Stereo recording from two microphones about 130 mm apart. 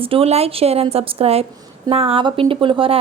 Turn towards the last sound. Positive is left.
turn(degrees=-45)  # may be behind; listen again after turning